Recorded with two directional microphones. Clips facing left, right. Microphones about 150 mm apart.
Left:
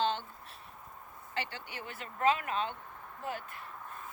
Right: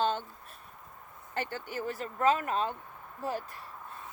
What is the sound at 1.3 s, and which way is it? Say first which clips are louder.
Speech: right 4 dB; 45° right (ahead or behind).